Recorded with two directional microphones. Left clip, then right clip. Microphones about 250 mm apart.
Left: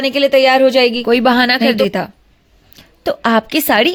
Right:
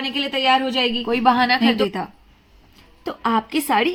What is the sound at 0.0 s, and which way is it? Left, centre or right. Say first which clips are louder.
A woman's voice: left 10 dB; left.